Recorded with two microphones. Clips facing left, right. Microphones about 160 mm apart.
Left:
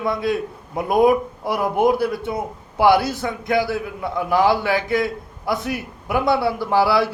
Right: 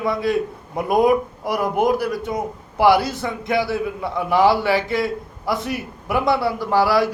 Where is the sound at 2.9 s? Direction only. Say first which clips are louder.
Even; centre (ahead or behind).